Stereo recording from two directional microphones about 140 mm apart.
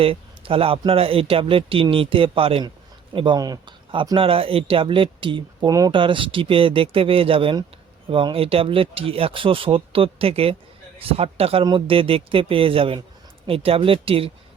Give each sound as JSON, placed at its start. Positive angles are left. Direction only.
{"t": 0.0, "sound": "speech", "side_deg": -40}